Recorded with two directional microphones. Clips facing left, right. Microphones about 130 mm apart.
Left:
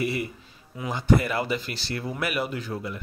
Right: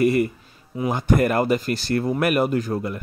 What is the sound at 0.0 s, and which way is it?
Speech, 45° right (ahead or behind).